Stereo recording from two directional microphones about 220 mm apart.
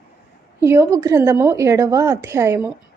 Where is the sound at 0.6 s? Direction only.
10° right (ahead or behind).